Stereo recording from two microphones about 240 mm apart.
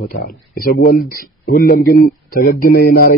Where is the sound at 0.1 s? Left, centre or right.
Left.